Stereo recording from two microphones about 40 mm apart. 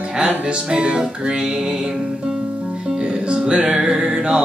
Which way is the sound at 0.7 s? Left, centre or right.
Right.